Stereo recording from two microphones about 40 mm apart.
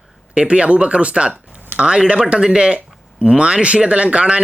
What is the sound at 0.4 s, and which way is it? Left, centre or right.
Speech, right.